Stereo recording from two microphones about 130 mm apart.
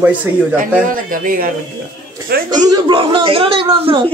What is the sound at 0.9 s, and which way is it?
Speech, 90° right.